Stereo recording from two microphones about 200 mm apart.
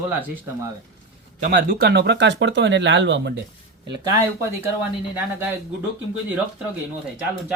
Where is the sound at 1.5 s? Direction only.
45° right (ahead or behind); by 3.4 s 60° right (ahead or behind).